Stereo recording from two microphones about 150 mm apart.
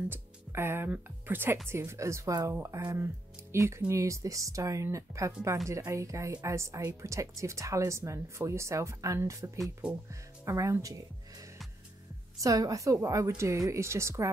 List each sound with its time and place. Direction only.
0.1 s speech: 15° right (ahead or behind)
9.6 s speech: 5° right (ahead or behind)
10.4 s speech: 20° right (ahead or behind)
12.4 s speech: 25° right (ahead or behind)